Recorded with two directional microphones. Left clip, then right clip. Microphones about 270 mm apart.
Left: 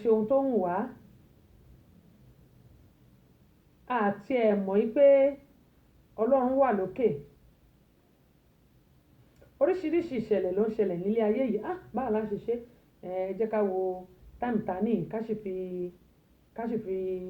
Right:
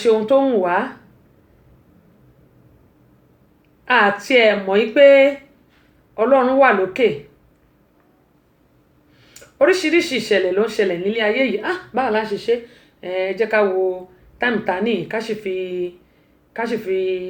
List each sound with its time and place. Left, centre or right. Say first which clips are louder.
0.0 s speech: right 10 dB; centre
3.8 s speech: right 14 dB; centre
9.6 s speech: right 12 dB; centre